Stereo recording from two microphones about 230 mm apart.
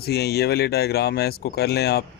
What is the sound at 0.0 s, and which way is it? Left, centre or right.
Speech, left.